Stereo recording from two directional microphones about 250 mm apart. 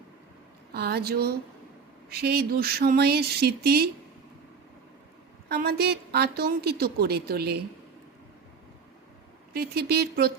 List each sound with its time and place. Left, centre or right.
0.7 s a woman's voice: right
5.5 s a woman's voice: right
9.5 s a woman's voice: right